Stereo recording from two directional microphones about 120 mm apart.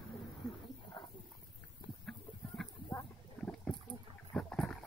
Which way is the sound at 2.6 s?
Centre (ahead or behind).